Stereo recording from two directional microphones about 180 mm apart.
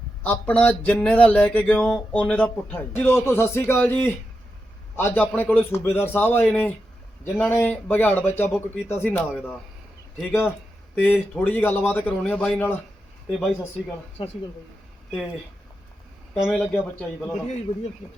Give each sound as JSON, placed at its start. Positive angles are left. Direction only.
{"t": 0.2, "sound": "a sound", "side_deg": 10}
{"t": 13.4, "sound": "a man's voice", "side_deg": 5}
{"t": 14.2, "sound": "speech", "side_deg": 30}
{"t": 16.3, "sound": "a man's voice", "side_deg": 0}
{"t": 17.7, "sound": "speech", "side_deg": 25}